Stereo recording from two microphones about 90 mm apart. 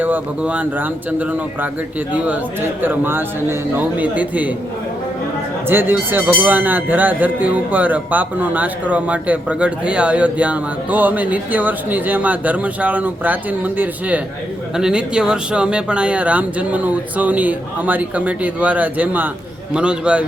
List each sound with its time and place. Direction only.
0.0 s speech: 15° right (ahead or behind)
5.6 s speech: 25° right (ahead or behind)
14.8 s speech: 10° right (ahead or behind)